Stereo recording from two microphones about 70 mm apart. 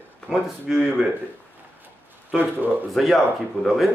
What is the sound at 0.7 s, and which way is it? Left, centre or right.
Speech, centre.